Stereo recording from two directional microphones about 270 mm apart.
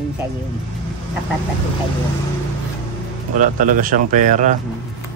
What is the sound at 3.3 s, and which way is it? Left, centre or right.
Speech, right.